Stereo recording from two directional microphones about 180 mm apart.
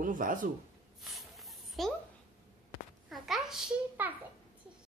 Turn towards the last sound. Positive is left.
turn(degrees=-5)  # may be behind; listen again after turning